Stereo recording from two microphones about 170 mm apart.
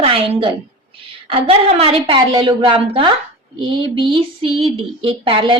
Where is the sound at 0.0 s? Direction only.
30° right (ahead or behind).